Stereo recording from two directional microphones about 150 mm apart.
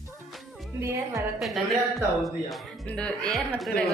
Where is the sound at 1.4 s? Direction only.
Centre (ahead or behind).